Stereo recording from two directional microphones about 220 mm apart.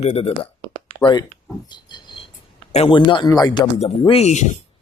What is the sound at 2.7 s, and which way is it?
Speech, 25° left (ahead or behind).